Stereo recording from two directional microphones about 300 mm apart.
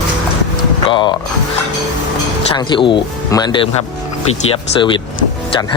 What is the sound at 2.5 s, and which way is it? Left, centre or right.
A man's voice, centre.